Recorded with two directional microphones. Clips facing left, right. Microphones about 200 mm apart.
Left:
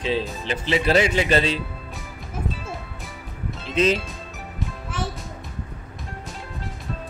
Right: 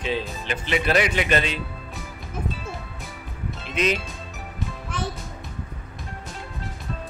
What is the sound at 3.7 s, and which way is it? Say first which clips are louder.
Speech: left 4 dB; 30° left (ahead or behind).